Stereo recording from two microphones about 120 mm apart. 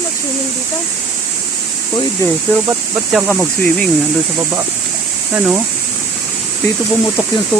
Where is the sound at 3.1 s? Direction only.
Centre (ahead or behind).